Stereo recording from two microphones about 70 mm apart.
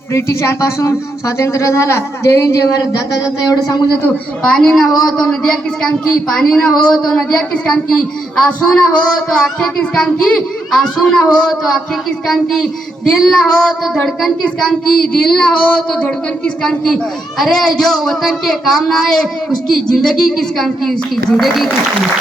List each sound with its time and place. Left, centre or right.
0.1 s speech: left
4.4 s child singing: centre
4.7 s child singing: centre
12.3 s a man's voice: centre
13.1 s child singing: centre
16.6 s a man's voice: centre